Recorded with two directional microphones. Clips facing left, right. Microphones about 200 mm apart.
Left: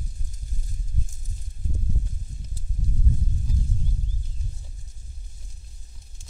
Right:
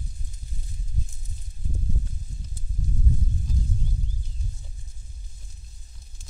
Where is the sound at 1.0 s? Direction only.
50° left (ahead or behind).